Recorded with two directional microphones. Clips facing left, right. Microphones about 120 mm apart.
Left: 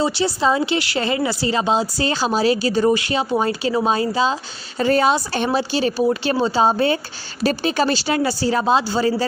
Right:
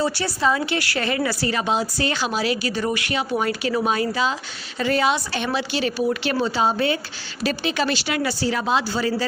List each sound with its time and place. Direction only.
0.0 s a woman's voice: 25° left (ahead or behind)